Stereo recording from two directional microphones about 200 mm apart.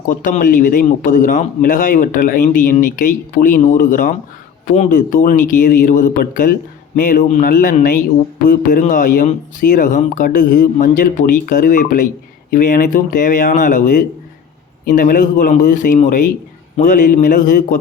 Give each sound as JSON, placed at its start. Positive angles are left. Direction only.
{"t": 0.1, "sound": "speech", "side_deg": 40}